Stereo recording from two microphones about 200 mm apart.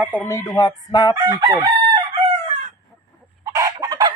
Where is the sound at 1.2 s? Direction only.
20° right (ahead or behind).